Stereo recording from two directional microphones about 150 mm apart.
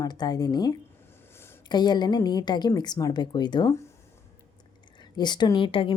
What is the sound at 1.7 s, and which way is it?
Speech, 30° left (ahead or behind).